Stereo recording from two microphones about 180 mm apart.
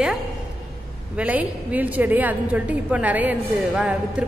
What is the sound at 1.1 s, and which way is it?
A woman's voice, 5° right (ahead or behind).